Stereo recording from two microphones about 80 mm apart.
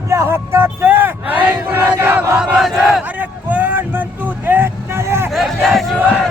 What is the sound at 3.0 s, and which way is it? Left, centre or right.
Vehicle, right.